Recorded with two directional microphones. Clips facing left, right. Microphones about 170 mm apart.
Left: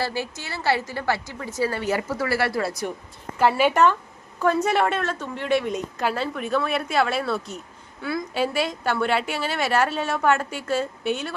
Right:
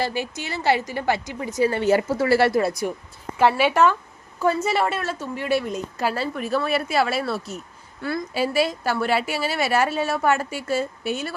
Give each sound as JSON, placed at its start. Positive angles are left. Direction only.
{"t": 0.0, "sound": "a woman's voice", "side_deg": -15}
{"t": 3.4, "sound": "a woman's voice", "side_deg": -5}